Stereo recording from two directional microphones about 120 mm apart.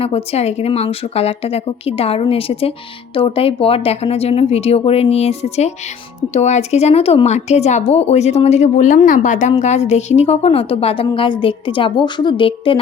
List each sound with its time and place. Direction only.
0.0 s speech: 60° left (ahead or behind)